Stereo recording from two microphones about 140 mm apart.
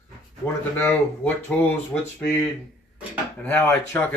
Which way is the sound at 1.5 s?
5° left (ahead or behind).